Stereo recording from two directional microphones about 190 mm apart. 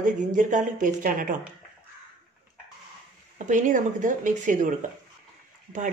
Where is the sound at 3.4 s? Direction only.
45° right (ahead or behind).